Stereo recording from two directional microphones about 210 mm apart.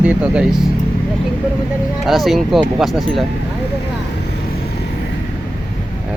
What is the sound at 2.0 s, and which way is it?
Speech, centre (ahead or behind).